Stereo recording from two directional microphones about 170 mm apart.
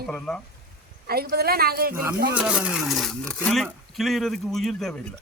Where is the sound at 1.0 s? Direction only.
65° right (ahead or behind).